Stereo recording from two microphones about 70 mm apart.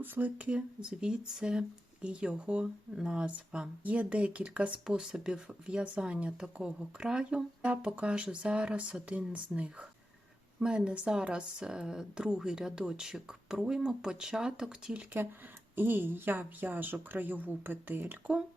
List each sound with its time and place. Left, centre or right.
0.0 s speech: right; by 14.9 s centre
15.2 s speech: right